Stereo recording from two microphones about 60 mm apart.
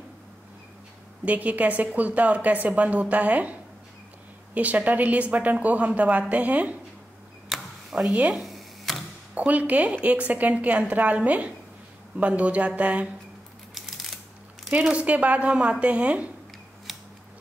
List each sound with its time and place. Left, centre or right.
1.2 s a woman's voice: right
4.6 s a woman's voice: right
7.4 s camera: centre
8.1 s a woman's voice: centre
8.4 s camera: centre
9.3 s a woman's voice: right
13.7 s coin: centre
14.9 s a woman's voice: right